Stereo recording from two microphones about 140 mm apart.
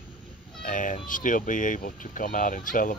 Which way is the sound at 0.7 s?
70° left (ahead or behind).